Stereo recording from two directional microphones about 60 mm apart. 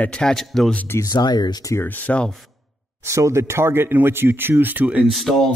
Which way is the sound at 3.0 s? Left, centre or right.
Right.